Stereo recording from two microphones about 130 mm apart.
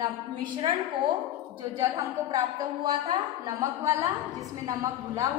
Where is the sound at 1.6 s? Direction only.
25° right (ahead or behind).